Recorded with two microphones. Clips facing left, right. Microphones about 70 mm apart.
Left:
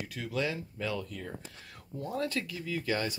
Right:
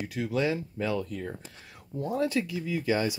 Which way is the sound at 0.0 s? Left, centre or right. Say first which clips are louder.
Right 5 dB; centre.